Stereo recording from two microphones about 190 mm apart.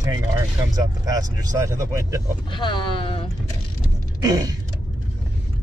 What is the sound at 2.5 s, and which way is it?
Speech, 25° left (ahead or behind).